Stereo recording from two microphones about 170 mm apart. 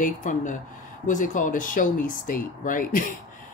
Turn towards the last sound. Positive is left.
turn(degrees=55)  # may be behind; listen again after turning